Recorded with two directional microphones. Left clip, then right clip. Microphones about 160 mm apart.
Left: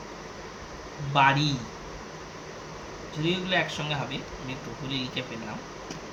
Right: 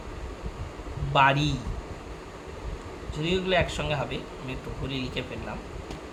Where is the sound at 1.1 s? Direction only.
65° right (ahead or behind).